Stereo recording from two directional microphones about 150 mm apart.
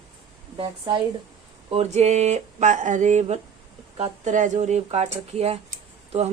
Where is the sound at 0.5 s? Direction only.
40° right (ahead or behind).